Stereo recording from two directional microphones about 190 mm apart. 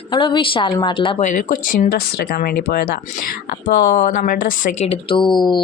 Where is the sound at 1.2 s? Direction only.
40° left (ahead or behind).